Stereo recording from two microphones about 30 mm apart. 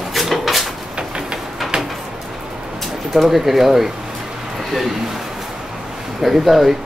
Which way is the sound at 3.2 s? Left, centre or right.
Centre.